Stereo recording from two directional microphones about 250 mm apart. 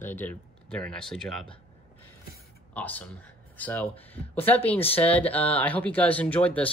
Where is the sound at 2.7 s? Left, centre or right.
Centre.